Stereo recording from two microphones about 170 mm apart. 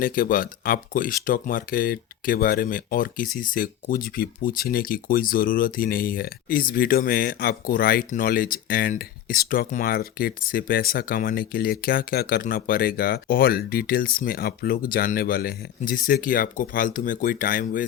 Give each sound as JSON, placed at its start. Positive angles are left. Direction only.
{"t": 0.0, "sound": "speech", "side_deg": 55}